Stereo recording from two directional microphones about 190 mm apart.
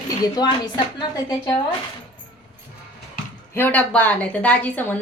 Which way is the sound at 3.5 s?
10° left (ahead or behind).